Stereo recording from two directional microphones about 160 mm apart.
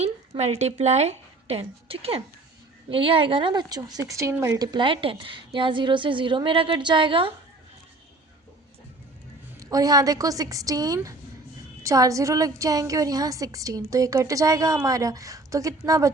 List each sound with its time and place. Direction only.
0.0 s a woman's voice: 40° right (ahead or behind)
9.6 s a woman's voice: 20° right (ahead or behind)